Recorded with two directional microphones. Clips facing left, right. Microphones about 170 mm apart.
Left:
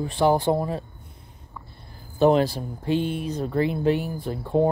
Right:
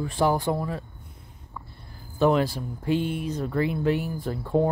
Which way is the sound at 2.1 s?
25° left (ahead or behind).